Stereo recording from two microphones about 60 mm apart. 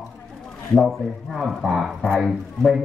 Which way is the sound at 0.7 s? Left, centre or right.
Centre.